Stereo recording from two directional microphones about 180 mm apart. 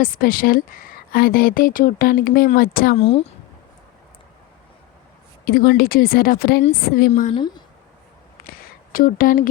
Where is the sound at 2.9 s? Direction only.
35° left (ahead or behind).